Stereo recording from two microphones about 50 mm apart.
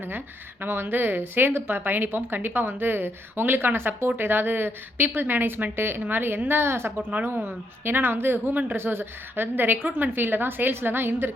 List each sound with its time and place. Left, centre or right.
0.6 s a woman's voice: right
7.1 s a woman's voice: right
8.7 s a woman's voice: right